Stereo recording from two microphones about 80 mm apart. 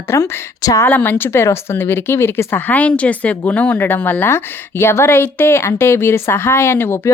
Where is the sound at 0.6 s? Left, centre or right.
Left.